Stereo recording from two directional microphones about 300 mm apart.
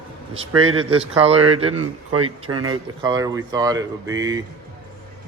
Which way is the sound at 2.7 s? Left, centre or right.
Centre.